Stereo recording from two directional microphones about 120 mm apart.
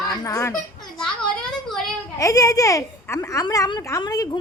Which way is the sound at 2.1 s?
30° left (ahead or behind).